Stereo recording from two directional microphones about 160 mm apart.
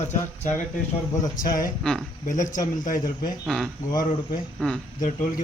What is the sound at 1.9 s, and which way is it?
Speech, 5° left (ahead or behind).